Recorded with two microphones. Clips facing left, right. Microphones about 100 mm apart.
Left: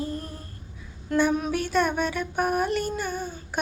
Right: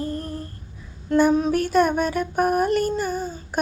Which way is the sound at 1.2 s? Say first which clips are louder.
Right 5 dB; 30° right (ahead or behind).